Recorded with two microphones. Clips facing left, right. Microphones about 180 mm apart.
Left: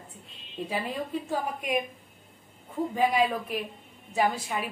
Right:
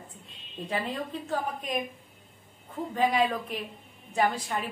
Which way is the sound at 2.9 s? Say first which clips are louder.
Even; 10° left (ahead or behind).